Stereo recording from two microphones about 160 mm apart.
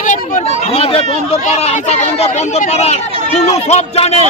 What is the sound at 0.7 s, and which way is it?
Speech, 35° left (ahead or behind).